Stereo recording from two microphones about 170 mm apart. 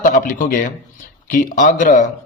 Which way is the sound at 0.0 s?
50° left (ahead or behind).